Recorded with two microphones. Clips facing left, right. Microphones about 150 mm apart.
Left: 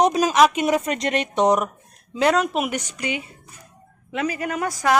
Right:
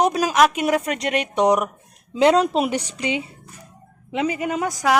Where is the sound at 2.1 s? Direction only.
25° right (ahead or behind).